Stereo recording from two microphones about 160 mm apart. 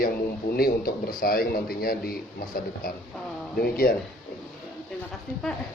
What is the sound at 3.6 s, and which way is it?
Speech, 65° left (ahead or behind).